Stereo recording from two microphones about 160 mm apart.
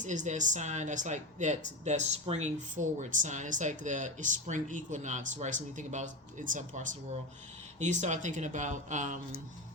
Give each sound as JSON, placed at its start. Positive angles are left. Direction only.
{"t": 0.0, "sound": "speech", "side_deg": -50}